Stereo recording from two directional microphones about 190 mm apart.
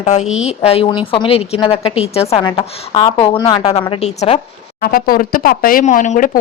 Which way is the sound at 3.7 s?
30° left (ahead or behind).